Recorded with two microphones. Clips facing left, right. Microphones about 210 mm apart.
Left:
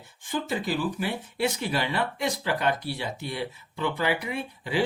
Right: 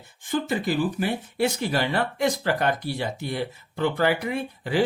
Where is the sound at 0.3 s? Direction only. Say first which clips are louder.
Right 4 dB; 55° right (ahead or behind).